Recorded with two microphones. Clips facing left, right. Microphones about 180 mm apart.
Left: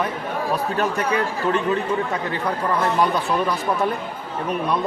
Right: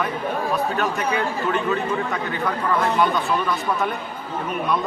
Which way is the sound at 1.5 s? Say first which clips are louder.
Left 3 dB; 30° left (ahead or behind).